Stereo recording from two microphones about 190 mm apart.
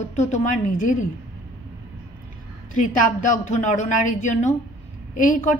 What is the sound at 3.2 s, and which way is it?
A woman's voice, 40° left (ahead or behind).